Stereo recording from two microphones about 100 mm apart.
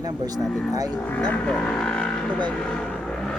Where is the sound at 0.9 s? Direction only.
15° left (ahead or behind).